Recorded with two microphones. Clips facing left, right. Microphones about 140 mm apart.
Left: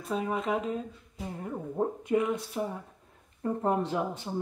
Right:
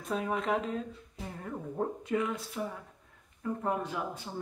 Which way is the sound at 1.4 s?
20° left (ahead or behind).